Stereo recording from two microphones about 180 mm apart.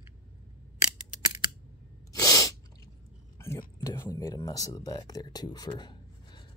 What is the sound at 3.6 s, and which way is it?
Speech, 15° left (ahead or behind).